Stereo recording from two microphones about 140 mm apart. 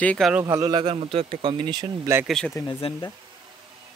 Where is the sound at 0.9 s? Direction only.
45° right (ahead or behind).